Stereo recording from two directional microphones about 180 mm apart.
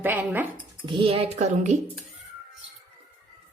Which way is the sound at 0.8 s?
25° right (ahead or behind).